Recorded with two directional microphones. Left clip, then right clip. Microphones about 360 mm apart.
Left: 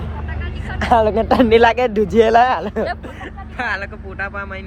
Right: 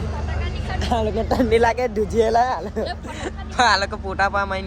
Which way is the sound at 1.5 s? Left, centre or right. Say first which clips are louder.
Left 4 dB; left.